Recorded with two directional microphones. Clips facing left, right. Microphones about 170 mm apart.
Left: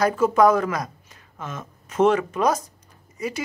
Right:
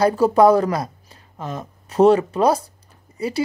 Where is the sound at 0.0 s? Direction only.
35° right (ahead or behind).